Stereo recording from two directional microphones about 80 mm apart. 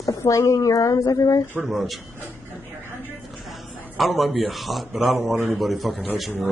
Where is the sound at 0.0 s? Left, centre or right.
Left.